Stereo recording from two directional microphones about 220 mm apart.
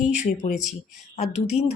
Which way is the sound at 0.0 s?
35° left (ahead or behind).